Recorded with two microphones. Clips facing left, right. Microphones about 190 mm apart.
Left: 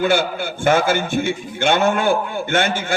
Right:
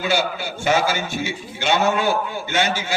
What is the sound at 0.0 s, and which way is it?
A man's voice, 55° left (ahead or behind).